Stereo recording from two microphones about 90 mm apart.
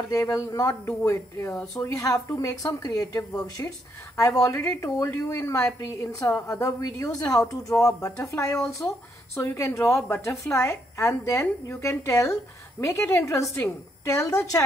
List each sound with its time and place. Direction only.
0.1 s a woman's voice: 40° left (ahead or behind)